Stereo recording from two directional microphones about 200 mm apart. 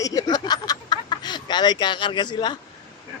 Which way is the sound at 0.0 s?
20° left (ahead or behind).